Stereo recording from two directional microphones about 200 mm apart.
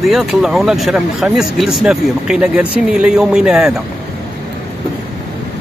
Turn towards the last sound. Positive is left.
turn(degrees=-5)  # may be behind; listen again after turning